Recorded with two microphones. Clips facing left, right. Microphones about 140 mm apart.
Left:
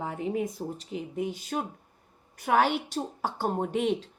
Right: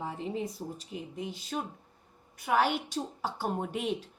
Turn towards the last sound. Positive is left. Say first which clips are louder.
# left 5 dB
turn(degrees=45)  # may be behind; listen again after turning